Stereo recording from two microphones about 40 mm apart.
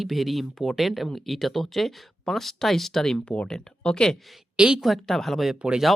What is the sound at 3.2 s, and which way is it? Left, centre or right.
Speech, left.